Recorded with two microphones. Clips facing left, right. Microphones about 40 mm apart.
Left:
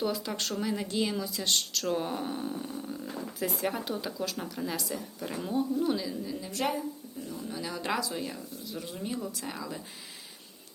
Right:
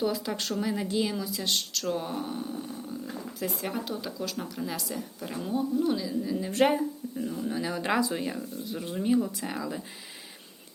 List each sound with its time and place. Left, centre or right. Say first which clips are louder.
0.0 s a woman's voice: right 2 dB; centre
6.5 s speech: right 8 dB; right
7.2 s speech: right 7 dB; right